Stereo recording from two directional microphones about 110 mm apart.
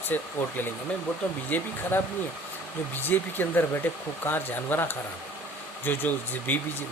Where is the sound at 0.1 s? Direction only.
15° left (ahead or behind).